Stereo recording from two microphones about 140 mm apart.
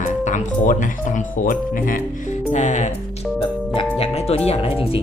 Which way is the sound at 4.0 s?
45° left (ahead or behind).